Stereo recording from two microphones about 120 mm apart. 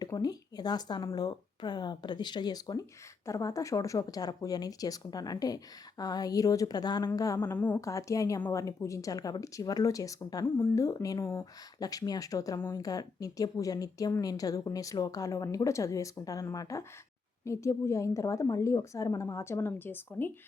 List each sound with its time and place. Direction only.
0.0 s a woman's voice: 35° left (ahead or behind)
7.5 s a woman's voice: 10° left (ahead or behind)
7.8 s a woman's voice: 25° left (ahead or behind)